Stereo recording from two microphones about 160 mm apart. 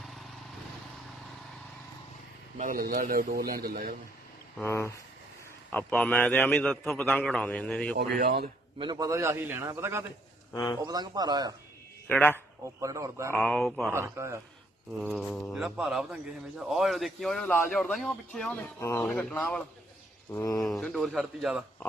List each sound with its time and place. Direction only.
2.6 s a man's voice: 60° right (ahead or behind)
4.6 s a man's voice: 15° left (ahead or behind)
7.9 s speech: 85° right
8.8 s a man's voice: 25° right (ahead or behind)
10.5 s speech: 25° left (ahead or behind)
10.8 s speech: 25° right (ahead or behind)
12.0 s a man's voice: 10° left (ahead or behind)
12.8 s speech: 20° right (ahead or behind)
13.3 s speech: 5° left (ahead or behind)
13.9 s a man's voice: 15° right (ahead or behind)
15.5 s speech: centre (ahead or behind)
18.8 s a man's voice: 15° left (ahead or behind)
20.3 s speech: 20° left (ahead or behind)
20.6 s speech: centre (ahead or behind)